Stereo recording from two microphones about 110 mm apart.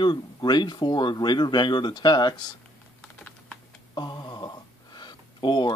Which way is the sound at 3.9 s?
40° left (ahead or behind).